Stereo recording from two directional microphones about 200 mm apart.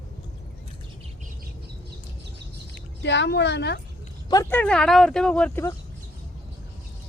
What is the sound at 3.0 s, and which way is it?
Speech, 60° left (ahead or behind).